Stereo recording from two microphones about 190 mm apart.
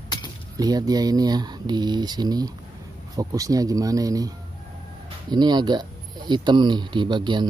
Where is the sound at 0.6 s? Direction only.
20° right (ahead or behind).